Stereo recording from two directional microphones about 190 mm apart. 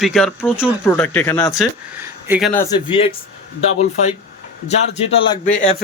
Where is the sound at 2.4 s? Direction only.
10° left (ahead or behind).